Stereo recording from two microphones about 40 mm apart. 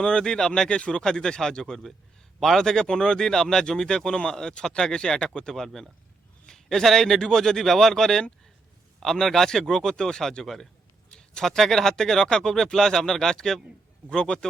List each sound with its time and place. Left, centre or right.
0.0 s speech: centre
5.5 s speech: centre
10.4 s speech: centre
11.1 s speech: centre
14.2 s speech: left